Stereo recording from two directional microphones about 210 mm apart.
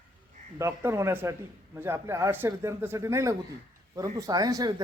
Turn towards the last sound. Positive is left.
turn(degrees=-15)  # may be behind; listen again after turning